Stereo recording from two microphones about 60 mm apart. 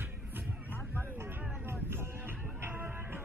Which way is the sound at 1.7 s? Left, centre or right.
Right.